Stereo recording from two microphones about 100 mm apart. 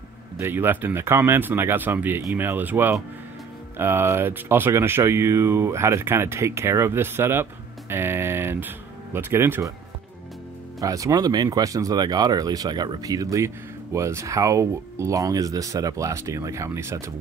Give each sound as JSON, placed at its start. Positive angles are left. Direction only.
{"t": 0.4, "sound": "speech", "side_deg": -20}
{"t": 10.8, "sound": "speech", "side_deg": -35}